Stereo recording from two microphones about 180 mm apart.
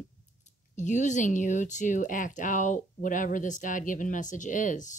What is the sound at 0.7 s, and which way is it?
Speech, 40° left (ahead or behind).